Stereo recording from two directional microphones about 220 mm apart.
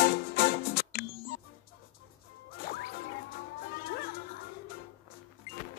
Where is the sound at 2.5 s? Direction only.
40° left (ahead or behind).